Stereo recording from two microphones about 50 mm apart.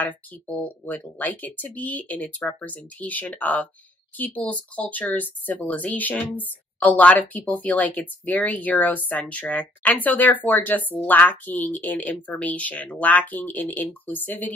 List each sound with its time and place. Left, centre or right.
0.6 s speech: left